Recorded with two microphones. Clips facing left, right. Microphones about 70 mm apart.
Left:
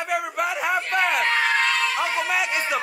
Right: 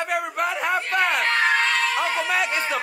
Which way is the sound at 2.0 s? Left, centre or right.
Centre.